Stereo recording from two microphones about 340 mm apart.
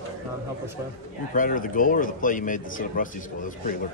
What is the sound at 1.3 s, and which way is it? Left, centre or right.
Speech, left.